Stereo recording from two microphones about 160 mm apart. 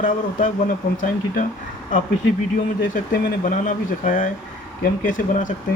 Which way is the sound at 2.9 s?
55° left (ahead or behind).